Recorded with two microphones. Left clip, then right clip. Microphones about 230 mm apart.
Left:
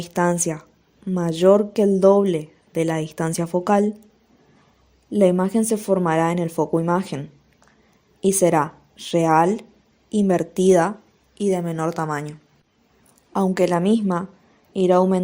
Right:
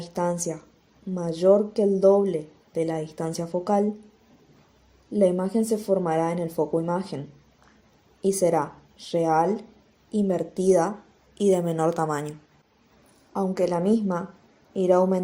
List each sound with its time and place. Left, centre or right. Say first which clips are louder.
0.0 s speech: left 6 dB; left
5.1 s speech: left 4 dB; left
8.2 s speech: left 4 dB; left
11.5 s a woman's voice: right 1 dB; left
13.3 s speech: left 5 dB; left